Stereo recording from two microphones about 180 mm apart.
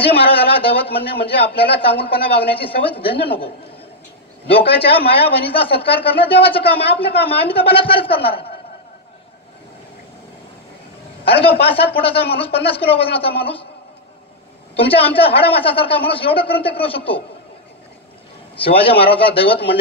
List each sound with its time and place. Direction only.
0.0 s speech: 30° left (ahead or behind)
4.7 s speech: 30° left (ahead or behind)
11.6 s speech: 30° left (ahead or behind)
14.9 s speech: 30° left (ahead or behind)
18.6 s speech: 30° left (ahead or behind)